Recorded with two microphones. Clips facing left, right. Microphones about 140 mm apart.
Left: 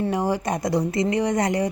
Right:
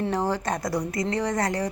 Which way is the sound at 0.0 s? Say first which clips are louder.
Left 2 dB; 10° left (ahead or behind).